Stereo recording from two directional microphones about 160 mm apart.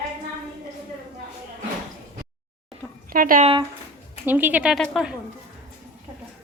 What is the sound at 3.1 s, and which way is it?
Speech, 60° right (ahead or behind).